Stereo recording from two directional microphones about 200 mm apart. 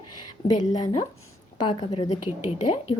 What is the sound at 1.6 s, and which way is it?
Speech, 30° left (ahead or behind).